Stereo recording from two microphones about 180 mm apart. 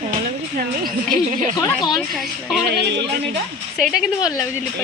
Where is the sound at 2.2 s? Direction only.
Centre (ahead or behind).